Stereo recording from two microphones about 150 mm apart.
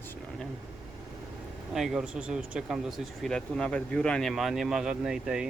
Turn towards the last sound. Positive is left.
turn(degrees=-5)  # may be behind; listen again after turning